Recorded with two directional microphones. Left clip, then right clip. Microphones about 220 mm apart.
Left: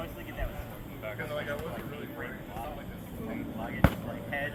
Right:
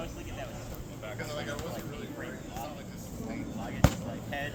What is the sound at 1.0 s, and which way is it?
Vehicle, 65° right (ahead or behind).